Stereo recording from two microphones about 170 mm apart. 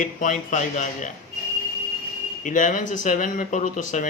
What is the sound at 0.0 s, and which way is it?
Speech, 50° left (ahead or behind).